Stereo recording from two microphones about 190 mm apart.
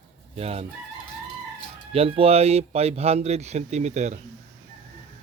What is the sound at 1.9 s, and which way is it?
Speech, 30° right (ahead or behind).